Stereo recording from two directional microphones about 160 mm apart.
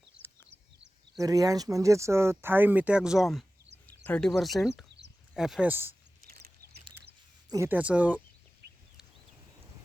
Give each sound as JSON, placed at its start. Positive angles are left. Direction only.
{"t": 1.2, "sound": "speech", "side_deg": -20}
{"t": 7.5, "sound": "speech", "side_deg": -15}
{"t": 8.6, "sound": "a sound", "side_deg": -90}